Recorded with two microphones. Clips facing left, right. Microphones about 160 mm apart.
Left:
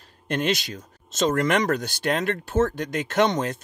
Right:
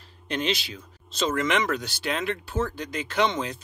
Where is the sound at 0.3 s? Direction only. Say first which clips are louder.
Left 3 dB; 50° left (ahead or behind).